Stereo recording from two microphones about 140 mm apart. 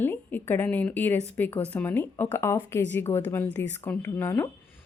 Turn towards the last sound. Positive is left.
turn(degrees=15)  # may be behind; listen again after turning